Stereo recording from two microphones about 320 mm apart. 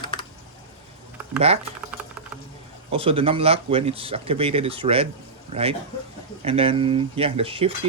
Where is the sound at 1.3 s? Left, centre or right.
Centre.